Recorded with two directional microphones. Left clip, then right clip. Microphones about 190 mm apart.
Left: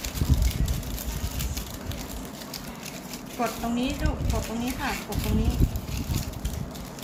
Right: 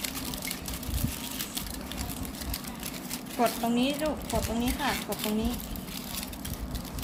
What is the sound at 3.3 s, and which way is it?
Speech, 50° right (ahead or behind).